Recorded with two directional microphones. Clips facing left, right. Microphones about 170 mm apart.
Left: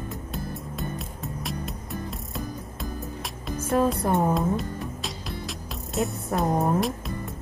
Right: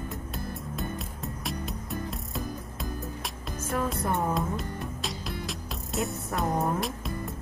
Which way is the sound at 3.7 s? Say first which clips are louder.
Left 8 dB; 35° left (ahead or behind).